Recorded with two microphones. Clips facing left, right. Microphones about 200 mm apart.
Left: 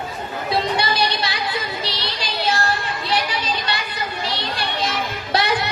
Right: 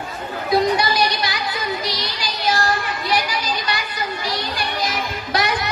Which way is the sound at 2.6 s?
25° left (ahead or behind).